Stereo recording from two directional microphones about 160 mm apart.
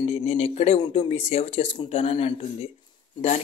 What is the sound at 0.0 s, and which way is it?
Speech, 40° left (ahead or behind).